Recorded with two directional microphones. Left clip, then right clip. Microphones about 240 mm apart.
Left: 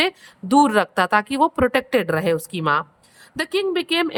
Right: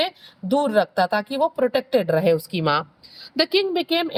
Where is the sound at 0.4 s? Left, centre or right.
Centre.